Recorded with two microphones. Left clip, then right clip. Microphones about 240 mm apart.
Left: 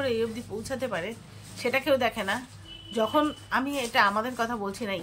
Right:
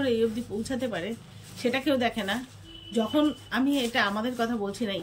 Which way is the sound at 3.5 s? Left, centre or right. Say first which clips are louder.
Even; centre.